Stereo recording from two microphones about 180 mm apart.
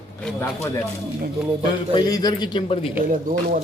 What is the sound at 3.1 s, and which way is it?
Speech, 50° right (ahead or behind).